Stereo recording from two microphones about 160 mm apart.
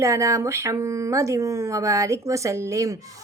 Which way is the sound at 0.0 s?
20° right (ahead or behind).